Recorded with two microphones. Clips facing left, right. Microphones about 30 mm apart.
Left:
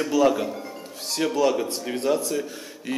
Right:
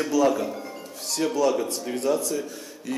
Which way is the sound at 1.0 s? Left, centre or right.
Left.